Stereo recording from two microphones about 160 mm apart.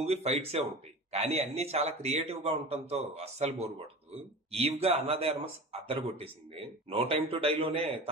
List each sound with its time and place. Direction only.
0.0 s a man's voice: 40° right (ahead or behind)